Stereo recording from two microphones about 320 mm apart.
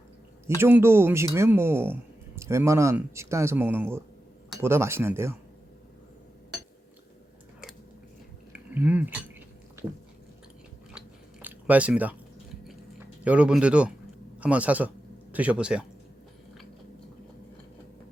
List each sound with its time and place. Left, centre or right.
0.4 s speech: centre
8.5 s speech: centre
11.4 s speech: centre
13.2 s speech: centre